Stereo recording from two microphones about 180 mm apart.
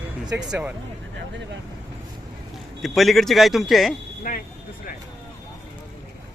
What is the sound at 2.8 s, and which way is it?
Speech, centre (ahead or behind).